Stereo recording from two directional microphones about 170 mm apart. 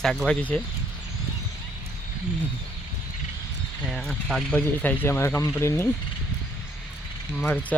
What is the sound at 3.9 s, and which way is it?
Speech, centre (ahead or behind).